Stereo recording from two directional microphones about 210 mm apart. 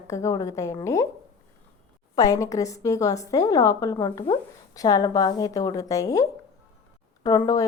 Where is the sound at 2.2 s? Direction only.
15° left (ahead or behind).